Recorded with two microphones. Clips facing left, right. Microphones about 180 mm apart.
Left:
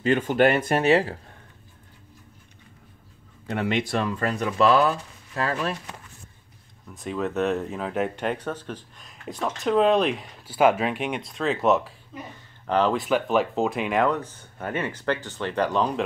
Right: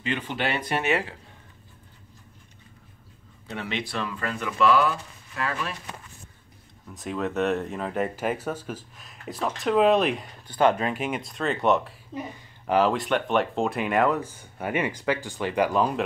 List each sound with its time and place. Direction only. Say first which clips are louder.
0.0 s speech: left 9 dB; 45° left (ahead or behind)
3.4 s speech: left 7 dB; 50° left (ahead or behind)
6.9 s speech: left 1 dB; centre (ahead or behind)